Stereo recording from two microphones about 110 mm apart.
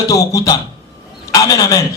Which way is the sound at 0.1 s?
30° left (ahead or behind).